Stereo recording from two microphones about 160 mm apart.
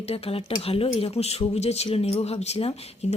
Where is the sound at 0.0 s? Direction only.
40° left (ahead or behind).